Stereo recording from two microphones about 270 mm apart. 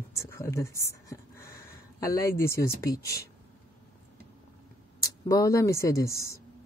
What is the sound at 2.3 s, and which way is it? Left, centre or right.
Speech, left.